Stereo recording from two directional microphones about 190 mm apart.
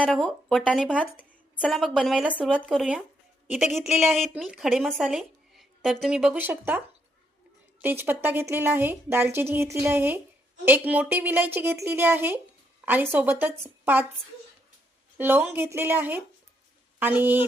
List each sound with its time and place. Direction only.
0.1 s a woman's voice: 5° left (ahead or behind)
15.2 s a woman's voice: 10° right (ahead or behind)